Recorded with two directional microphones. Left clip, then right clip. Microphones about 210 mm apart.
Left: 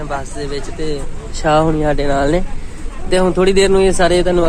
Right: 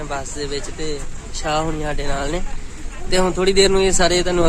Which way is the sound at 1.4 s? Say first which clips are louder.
Left 8 dB; 15° left (ahead or behind).